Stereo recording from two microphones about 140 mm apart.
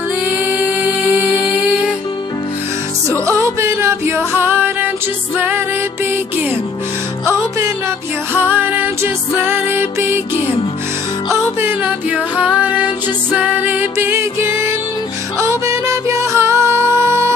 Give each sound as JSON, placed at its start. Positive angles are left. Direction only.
{"t": 3.3, "sound": "music", "side_deg": -20}
{"t": 8.4, "sound": "music", "side_deg": -15}
{"t": 11.6, "sound": "music", "side_deg": -10}